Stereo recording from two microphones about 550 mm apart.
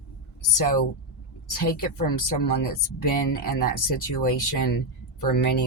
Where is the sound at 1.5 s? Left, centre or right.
Left.